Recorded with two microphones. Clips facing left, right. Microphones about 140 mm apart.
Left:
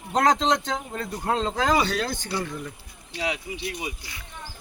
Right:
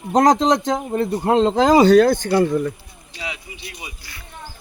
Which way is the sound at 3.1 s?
70° left (ahead or behind).